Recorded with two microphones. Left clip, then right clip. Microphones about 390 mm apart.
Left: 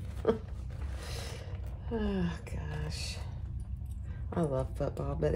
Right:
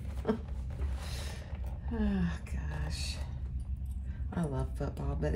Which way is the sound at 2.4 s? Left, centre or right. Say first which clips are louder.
Left 2 dB; centre.